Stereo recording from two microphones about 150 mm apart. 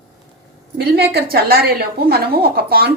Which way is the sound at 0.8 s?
90° right.